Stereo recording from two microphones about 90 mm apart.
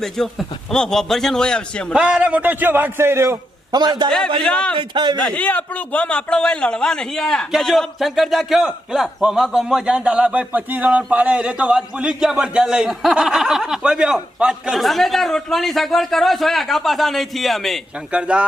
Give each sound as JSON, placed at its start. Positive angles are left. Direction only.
{"t": 0.0, "sound": "a man's voice", "side_deg": 5}
{"t": 1.9, "sound": "a man's voice", "side_deg": -10}
{"t": 3.7, "sound": "a man's voice", "side_deg": -50}
{"t": 4.4, "sound": "a man's voice", "side_deg": 10}
{"t": 4.8, "sound": "a man's voice", "side_deg": -60}
{"t": 5.2, "sound": "a man's voice", "side_deg": 15}
{"t": 18.1, "sound": "speech", "side_deg": -10}